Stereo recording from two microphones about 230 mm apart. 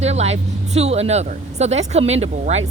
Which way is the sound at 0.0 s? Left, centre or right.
Right.